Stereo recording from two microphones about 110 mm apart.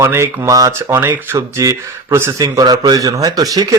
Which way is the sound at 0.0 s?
25° right (ahead or behind).